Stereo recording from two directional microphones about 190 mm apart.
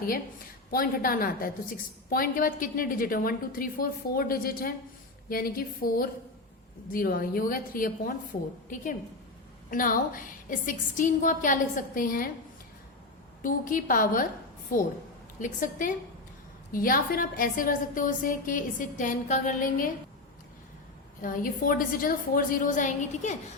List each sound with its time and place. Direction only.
0.7 s a woman's voice: 50° left (ahead or behind)
13.4 s a woman's voice: 45° left (ahead or behind)
21.2 s a woman's voice: 45° left (ahead or behind)